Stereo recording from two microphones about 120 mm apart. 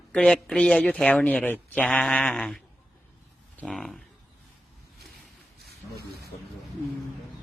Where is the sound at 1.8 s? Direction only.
5° left (ahead or behind).